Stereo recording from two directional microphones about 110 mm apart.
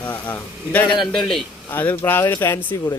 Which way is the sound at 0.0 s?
15° left (ahead or behind).